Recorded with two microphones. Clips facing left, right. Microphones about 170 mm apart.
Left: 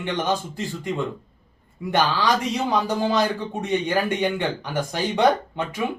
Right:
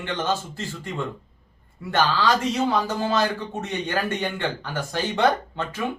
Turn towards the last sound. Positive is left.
turn(degrees=15)  # may be behind; listen again after turning